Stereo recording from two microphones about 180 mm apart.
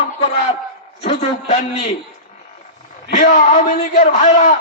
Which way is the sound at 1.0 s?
40° left (ahead or behind).